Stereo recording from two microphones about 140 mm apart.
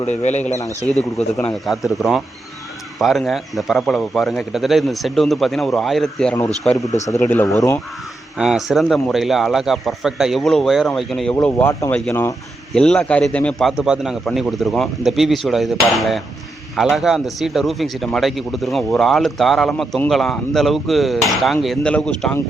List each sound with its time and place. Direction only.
0.0 s speech: 55° left (ahead or behind)
1.4 s speech: 5° left (ahead or behind)
7.1 s speech: 15° left (ahead or behind)
8.4 s speech: 5° right (ahead or behind)
11.4 s speech: 15° left (ahead or behind)
11.9 s speech: 5° left (ahead or behind)
13.7 s speech: 5° right (ahead or behind)